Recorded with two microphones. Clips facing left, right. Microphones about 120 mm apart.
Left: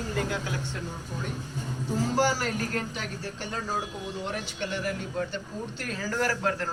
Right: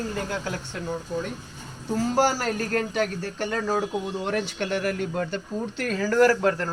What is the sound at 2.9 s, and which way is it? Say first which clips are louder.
Speech: right 9 dB; 65° right (ahead or behind).